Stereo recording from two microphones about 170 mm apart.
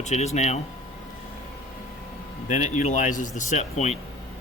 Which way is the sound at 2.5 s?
45° left (ahead or behind).